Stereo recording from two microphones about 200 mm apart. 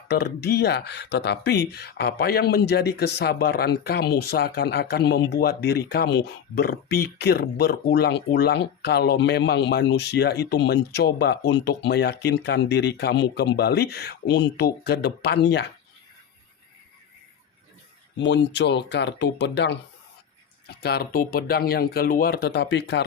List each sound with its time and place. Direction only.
0.1 s speech: 55° left (ahead or behind)
18.2 s speech: 60° left (ahead or behind)